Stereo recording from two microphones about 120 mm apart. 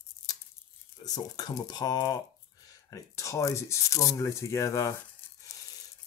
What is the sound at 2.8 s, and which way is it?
Speech, 25° left (ahead or behind).